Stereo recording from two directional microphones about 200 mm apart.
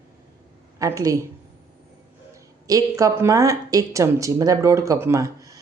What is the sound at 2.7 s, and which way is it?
Speech, 15° right (ahead or behind).